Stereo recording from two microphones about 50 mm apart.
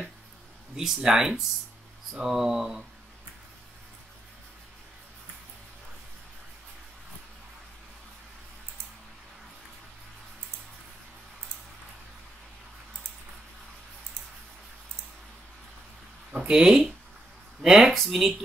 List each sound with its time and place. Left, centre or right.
0.7 s speech: centre
16.3 s a sound: centre
17.6 s speech: centre